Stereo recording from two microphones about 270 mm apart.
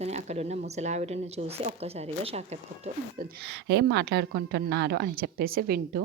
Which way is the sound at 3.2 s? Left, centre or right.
Right.